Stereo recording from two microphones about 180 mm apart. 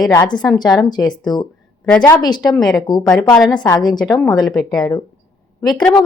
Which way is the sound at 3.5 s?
20° left (ahead or behind).